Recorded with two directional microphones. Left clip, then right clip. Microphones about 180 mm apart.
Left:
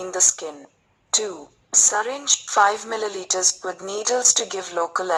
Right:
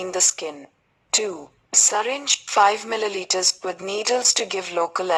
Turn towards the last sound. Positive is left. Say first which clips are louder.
# right 1 dB
turn(degrees=-10)  # may be behind; listen again after turning